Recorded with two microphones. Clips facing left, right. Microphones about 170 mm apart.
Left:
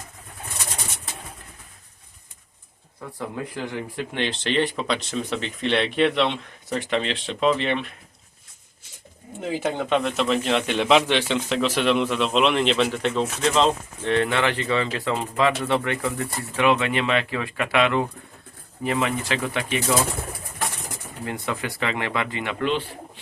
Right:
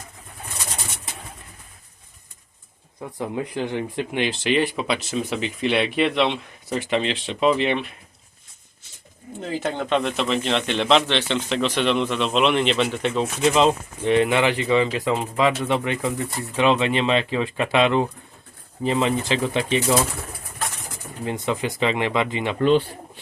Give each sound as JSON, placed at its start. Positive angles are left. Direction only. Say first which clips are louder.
{"t": 3.2, "sound": "speech", "louder": "right 4 dB", "side_deg": -20}
{"t": 9.4, "sound": "speech", "louder": "left 1 dB", "side_deg": 10}
{"t": 21.2, "sound": "speech", "louder": "right 4 dB", "side_deg": -20}